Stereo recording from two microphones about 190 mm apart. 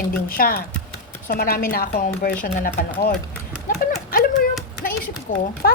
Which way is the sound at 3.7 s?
50° left (ahead or behind).